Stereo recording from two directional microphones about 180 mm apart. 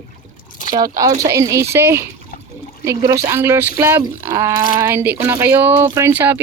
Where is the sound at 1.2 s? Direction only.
20° right (ahead or behind).